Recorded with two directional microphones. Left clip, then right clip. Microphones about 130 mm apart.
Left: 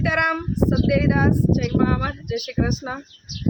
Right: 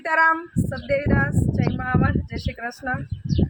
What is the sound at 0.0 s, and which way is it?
Speech, 15° left (ahead or behind).